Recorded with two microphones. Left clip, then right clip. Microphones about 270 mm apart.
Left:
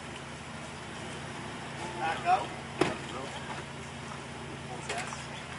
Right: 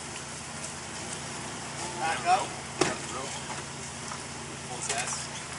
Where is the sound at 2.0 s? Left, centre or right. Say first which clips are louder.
Right 2 dB; centre.